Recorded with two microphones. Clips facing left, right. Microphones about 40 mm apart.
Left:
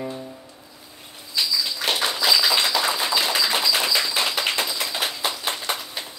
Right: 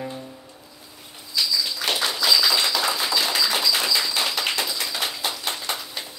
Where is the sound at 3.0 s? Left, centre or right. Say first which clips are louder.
Left 1 dB; left.